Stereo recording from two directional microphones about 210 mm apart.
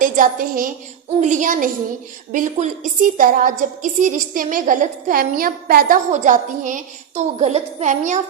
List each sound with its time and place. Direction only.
0.0 s a woman's voice: 40° right (ahead or behind)